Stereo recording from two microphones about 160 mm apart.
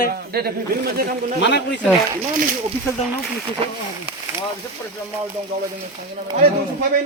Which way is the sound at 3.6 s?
35° right (ahead or behind).